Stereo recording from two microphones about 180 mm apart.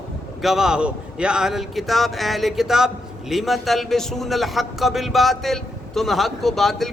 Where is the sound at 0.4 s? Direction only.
Centre (ahead or behind).